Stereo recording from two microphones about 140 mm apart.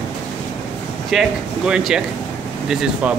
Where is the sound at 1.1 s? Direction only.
5° right (ahead or behind).